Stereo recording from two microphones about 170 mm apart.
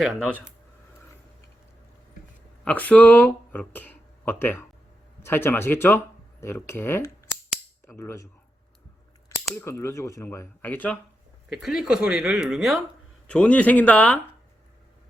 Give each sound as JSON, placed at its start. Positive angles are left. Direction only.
{"t": 0.0, "sound": "speech", "side_deg": 5}
{"t": 2.6, "sound": "speech", "side_deg": 10}
{"t": 9.3, "sound": "speech", "side_deg": 15}
{"t": 11.4, "sound": "speech", "side_deg": -5}